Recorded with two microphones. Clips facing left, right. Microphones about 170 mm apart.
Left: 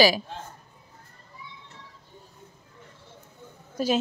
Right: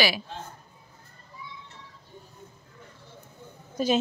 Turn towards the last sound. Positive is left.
turn(degrees=5)  # may be behind; listen again after turning